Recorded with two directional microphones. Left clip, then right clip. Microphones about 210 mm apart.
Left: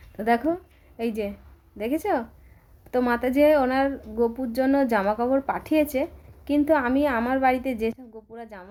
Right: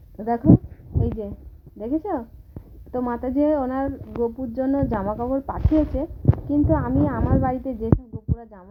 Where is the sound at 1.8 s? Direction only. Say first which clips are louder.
Left 1 dB; 30° left (ahead or behind).